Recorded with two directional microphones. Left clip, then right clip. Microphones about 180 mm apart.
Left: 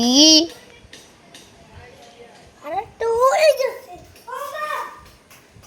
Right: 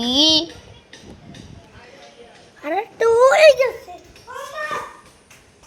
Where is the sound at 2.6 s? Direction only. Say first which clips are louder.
Right 4 dB; 65° right (ahead or behind).